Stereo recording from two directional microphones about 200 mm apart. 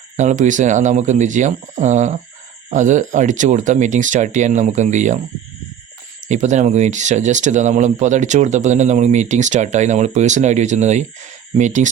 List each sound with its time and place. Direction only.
0.2 s speech: 40° right (ahead or behind)
6.2 s speech: 35° right (ahead or behind)